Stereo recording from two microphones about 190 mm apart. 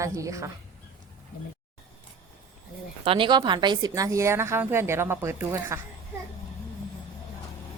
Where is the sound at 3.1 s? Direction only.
25° right (ahead or behind).